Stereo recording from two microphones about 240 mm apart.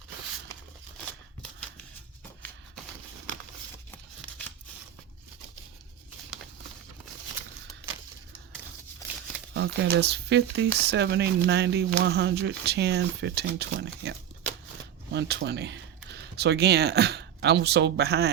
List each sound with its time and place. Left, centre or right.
9.6 s speech: right